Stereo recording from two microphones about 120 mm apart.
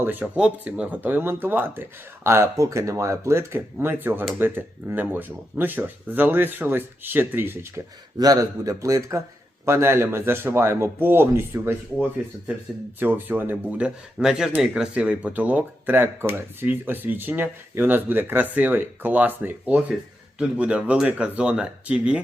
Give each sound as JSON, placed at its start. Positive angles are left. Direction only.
{"t": 0.0, "sound": "speech", "side_deg": -15}
{"t": 8.2, "sound": "speech", "side_deg": -30}